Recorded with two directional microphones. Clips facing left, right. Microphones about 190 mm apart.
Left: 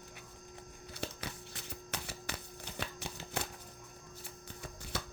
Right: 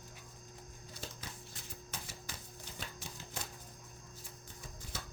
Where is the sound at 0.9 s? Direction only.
70° left (ahead or behind).